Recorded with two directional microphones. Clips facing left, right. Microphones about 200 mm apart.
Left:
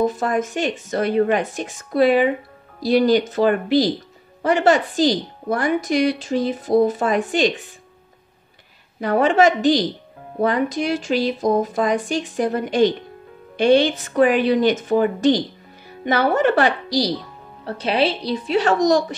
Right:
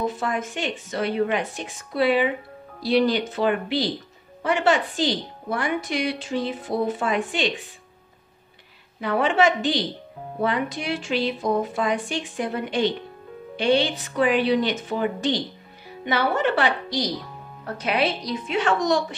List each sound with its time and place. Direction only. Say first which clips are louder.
0.0 s a woman's voice: left 6 dB; 45° left (ahead or behind)
9.0 s a woman's voice: left 5 dB; 45° left (ahead or behind)